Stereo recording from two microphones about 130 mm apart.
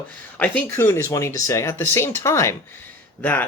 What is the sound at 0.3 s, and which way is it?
Speech, 10° left (ahead or behind).